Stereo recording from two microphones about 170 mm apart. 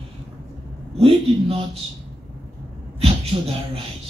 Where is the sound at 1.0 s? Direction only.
35° right (ahead or behind).